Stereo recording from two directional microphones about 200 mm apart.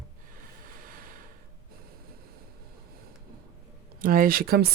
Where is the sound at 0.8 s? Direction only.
45° right (ahead or behind).